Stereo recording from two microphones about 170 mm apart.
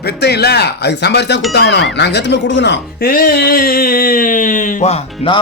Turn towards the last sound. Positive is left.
turn(degrees=35)  # may be behind; listen again after turning